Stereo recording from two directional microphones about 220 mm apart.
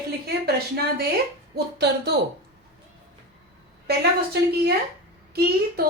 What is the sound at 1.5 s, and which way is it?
Speech, 50° right (ahead or behind).